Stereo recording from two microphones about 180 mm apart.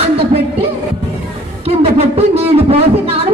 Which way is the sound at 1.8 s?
35° right (ahead or behind).